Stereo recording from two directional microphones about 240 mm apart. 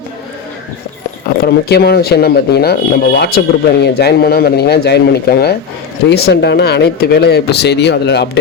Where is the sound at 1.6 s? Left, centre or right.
Left.